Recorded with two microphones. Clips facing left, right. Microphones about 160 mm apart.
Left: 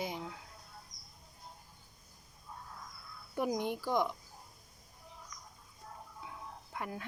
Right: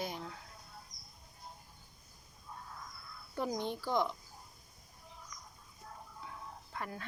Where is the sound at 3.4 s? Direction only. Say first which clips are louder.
Left 3 dB; 15° left (ahead or behind).